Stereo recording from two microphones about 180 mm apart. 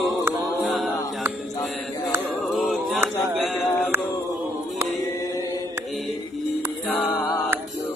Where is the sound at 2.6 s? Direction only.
Centre (ahead or behind).